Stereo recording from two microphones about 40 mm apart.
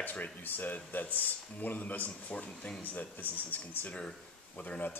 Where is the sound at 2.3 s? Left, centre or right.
Left.